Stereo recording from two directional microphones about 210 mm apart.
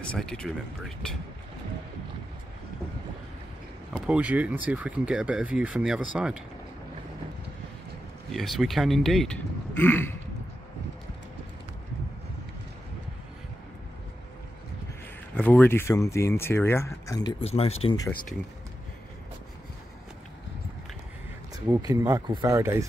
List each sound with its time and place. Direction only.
0.1 s speech: 5° left (ahead or behind)
3.9 s speech: 5° right (ahead or behind)
8.3 s speech: centre (ahead or behind)
15.3 s speech: 10° left (ahead or behind); by 17.7 s 30° left (ahead or behind)
17.8 s speech: 15° left (ahead or behind)
21.6 s speech: 15° right (ahead or behind)